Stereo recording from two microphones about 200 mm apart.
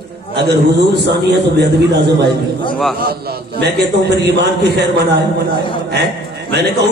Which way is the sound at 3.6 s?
55° right (ahead or behind).